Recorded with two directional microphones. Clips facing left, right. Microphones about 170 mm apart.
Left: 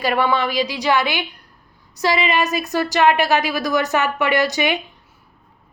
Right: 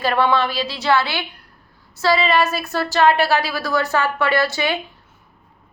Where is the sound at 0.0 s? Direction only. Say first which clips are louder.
Right 1 dB; 10° left (ahead or behind).